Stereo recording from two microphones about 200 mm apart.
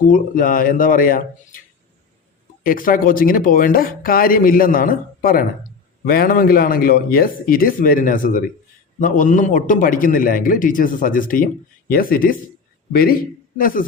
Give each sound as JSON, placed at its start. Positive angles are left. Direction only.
{"t": 0.1, "sound": "speech", "side_deg": 45}
{"t": 2.6, "sound": "speech", "side_deg": 45}
{"t": 13.6, "sound": "speech", "side_deg": 45}